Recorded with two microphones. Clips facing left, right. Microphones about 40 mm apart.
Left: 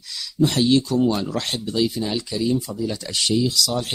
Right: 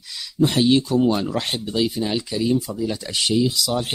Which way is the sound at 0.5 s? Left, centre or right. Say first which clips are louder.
Right 1 dB; centre.